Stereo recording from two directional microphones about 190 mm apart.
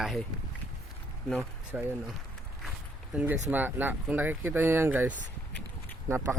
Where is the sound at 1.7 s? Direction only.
5° right (ahead or behind).